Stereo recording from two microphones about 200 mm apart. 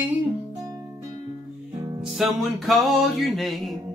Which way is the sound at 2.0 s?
Centre (ahead or behind).